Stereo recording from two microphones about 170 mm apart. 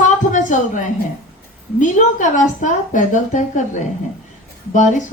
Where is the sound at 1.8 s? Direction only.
45° left (ahead or behind).